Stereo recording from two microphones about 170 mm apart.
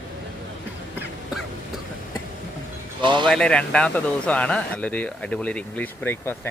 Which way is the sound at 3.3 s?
5° left (ahead or behind).